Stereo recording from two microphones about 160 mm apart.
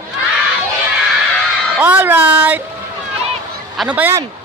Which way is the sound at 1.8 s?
10° right (ahead or behind).